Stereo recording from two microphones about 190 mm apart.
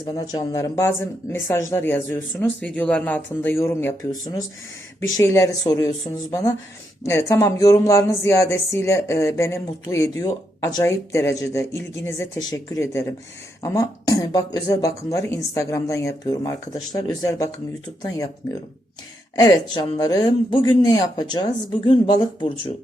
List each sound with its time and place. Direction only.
0.0 s speech: 20° left (ahead or behind)
4.9 s speech: 15° left (ahead or behind)
7.0 s speech: 15° left (ahead or behind)
19.4 s speech: 20° left (ahead or behind)